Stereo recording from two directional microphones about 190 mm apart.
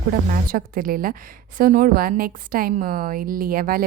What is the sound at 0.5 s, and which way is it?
A woman's voice, 50° right (ahead or behind).